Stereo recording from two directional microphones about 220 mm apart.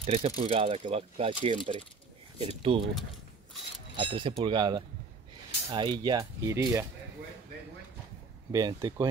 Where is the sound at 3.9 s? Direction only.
25° right (ahead or behind).